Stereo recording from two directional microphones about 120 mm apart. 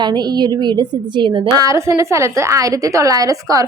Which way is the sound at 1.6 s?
25° right (ahead or behind).